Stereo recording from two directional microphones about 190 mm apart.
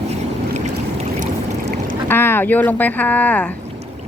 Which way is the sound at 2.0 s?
10° left (ahead or behind).